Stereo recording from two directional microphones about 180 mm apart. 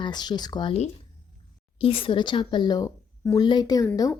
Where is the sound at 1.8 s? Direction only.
30° left (ahead or behind).